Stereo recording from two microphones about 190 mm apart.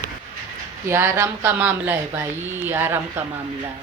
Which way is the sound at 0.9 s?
15° right (ahead or behind).